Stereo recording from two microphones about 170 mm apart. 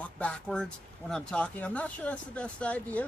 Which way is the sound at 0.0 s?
5° left (ahead or behind).